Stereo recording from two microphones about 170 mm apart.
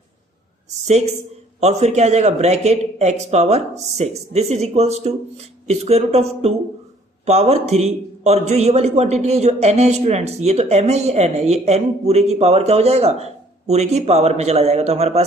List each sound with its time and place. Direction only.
0.8 s a man's voice: 40° right (ahead or behind)